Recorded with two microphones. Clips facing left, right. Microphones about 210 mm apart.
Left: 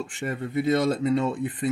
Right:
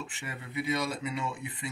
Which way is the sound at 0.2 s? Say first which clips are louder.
Left 11 dB; 50° left (ahead or behind).